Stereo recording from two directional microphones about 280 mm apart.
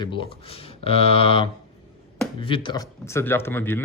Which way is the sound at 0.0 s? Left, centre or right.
Centre.